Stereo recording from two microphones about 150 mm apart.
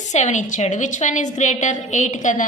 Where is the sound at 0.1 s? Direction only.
50° left (ahead or behind).